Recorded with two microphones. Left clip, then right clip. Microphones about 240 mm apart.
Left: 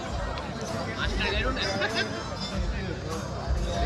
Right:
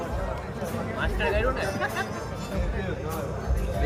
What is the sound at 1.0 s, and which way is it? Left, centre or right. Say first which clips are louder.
Speech: right 4 dB; centre.